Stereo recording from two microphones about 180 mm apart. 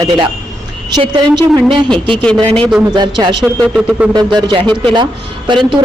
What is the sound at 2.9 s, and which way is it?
Speech, 25° right (ahead or behind).